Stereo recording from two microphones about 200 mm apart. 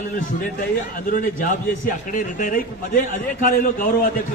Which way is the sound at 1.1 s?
40° left (ahead or behind).